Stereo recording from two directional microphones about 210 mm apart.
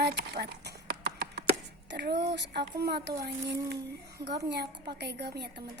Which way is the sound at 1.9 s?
55° right (ahead or behind).